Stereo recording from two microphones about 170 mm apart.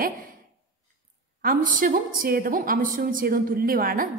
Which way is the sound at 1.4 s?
55° right (ahead or behind).